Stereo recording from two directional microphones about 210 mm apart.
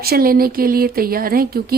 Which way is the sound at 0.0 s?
45° right (ahead or behind).